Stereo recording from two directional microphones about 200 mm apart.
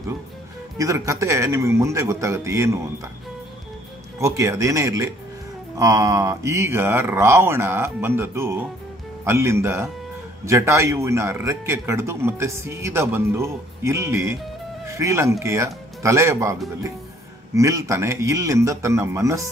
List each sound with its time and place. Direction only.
0.7 s a man's voice: 15° right (ahead or behind)
4.2 s a man's voice: 15° right (ahead or behind)
17.6 s a man's voice: 15° right (ahead or behind)